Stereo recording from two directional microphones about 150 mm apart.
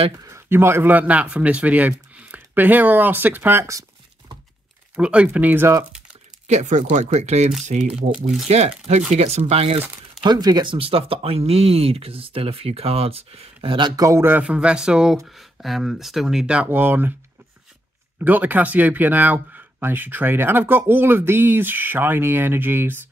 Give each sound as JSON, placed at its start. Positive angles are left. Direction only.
{"t": 0.2, "sound": "speech", "side_deg": -15}
{"t": 4.9, "sound": "speech", "side_deg": -5}
{"t": 6.4, "sound": "speech", "side_deg": -55}
{"t": 9.8, "sound": "crumpling", "side_deg": -10}
{"t": 10.2, "sound": "speech", "side_deg": -30}
{"t": 18.2, "sound": "speech", "side_deg": -10}